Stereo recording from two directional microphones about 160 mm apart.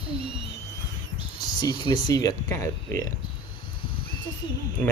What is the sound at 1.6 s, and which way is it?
Speech, 25° left (ahead or behind).